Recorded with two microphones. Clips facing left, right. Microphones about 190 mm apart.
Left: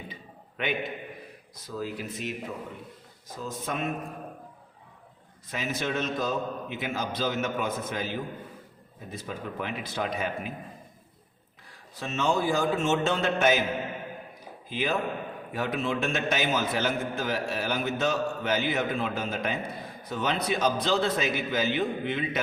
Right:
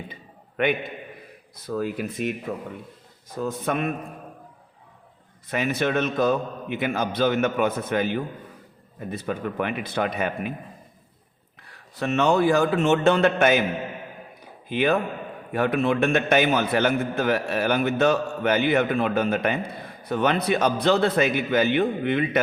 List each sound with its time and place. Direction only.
0.5 s a man's voice: 55° right (ahead or behind)
3.3 s a man's voice: 60° right (ahead or behind)
5.5 s a man's voice: 60° right (ahead or behind)
11.9 s a man's voice: 65° right (ahead or behind)
14.7 s a man's voice: 60° right (ahead or behind)